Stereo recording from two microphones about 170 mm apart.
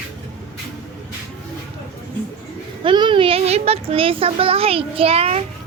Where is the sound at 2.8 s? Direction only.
30° right (ahead or behind).